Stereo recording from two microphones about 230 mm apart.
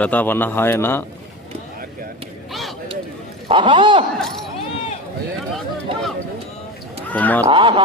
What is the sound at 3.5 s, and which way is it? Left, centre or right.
Speech, right.